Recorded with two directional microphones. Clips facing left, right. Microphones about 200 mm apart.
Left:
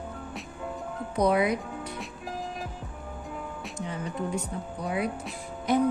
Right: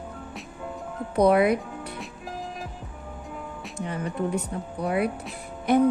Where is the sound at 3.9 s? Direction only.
60° right (ahead or behind).